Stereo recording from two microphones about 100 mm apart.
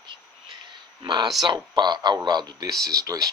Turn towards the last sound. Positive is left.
turn(degrees=-40)  # may be behind; listen again after turning